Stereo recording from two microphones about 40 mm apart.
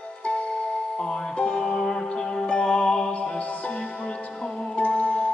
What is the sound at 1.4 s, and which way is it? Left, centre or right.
Music, left.